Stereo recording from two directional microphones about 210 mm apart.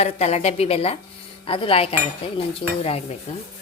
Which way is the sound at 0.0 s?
30° left (ahead or behind).